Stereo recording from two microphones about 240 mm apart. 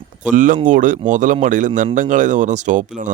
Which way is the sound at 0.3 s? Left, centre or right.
Right.